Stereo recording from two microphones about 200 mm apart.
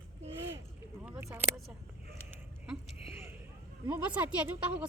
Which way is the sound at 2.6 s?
10° right (ahead or behind).